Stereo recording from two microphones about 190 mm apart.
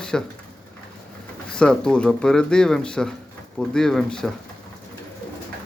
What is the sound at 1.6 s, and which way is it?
Speech, 5° left (ahead or behind).